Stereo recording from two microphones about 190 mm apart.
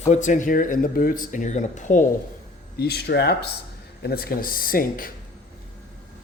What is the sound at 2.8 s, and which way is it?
Speech, 60° left (ahead or behind).